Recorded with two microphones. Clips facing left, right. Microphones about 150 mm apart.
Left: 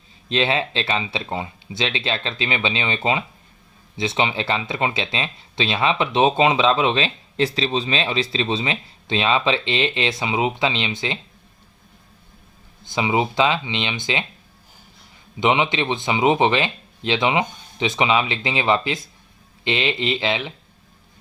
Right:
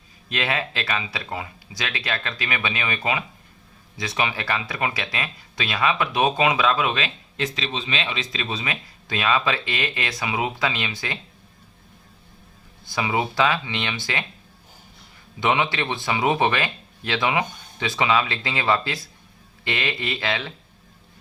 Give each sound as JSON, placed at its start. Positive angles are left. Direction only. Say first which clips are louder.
{"t": 0.3, "sound": "speech", "louder": "left 5 dB", "side_deg": 25}
{"t": 12.8, "sound": "speech", "louder": "left 3 dB", "side_deg": 20}
{"t": 15.4, "sound": "speech", "louder": "left 3 dB", "side_deg": 20}